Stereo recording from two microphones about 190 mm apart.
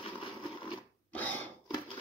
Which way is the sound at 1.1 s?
10° left (ahead or behind).